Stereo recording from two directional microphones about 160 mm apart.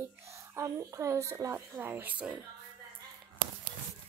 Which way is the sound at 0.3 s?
20° right (ahead or behind).